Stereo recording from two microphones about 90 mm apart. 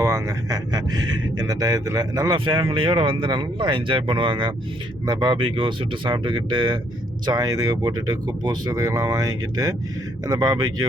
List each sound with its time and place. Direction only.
0.0 s speech: 35° right (ahead or behind)
2.3 s speech: 60° right (ahead or behind)
7.3 s speech: 45° right (ahead or behind)